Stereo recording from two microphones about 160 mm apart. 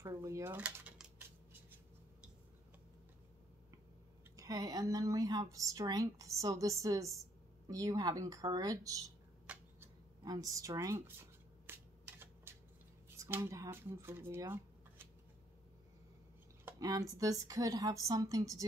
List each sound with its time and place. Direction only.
0.0 s drawer open or close: 20° right (ahead or behind)
4.4 s a woman's voice: 20° right (ahead or behind)
9.5 s a sound: 10° right (ahead or behind)
10.2 s a woman's voice: 20° right (ahead or behind)
11.6 s shuffling cards: 15° right (ahead or behind)
13.1 s speech: 15° right (ahead or behind)
16.6 s a woman's voice: 20° right (ahead or behind)